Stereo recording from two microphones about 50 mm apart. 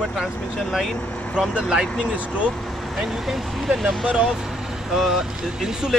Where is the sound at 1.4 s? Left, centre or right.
Centre.